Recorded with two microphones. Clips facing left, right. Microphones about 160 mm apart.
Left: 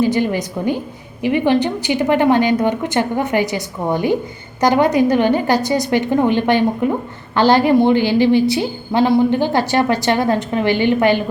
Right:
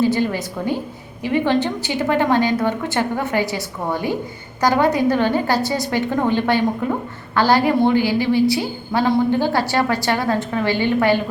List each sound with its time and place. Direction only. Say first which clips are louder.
0.0 s a woman's voice: left 2 dB; 15° left (ahead or behind)